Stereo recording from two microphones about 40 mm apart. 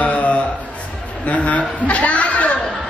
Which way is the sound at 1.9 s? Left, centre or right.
Left.